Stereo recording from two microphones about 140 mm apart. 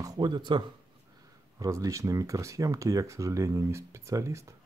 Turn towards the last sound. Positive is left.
turn(degrees=-20)  # may be behind; listen again after turning